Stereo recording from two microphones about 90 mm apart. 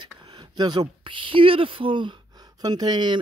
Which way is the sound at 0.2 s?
55° right (ahead or behind).